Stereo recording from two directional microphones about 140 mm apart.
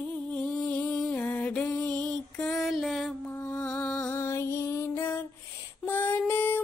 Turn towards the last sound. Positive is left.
turn(degrees=15)  # may be behind; listen again after turning